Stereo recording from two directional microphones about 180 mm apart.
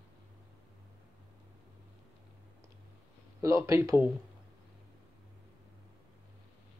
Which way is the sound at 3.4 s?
15° right (ahead or behind).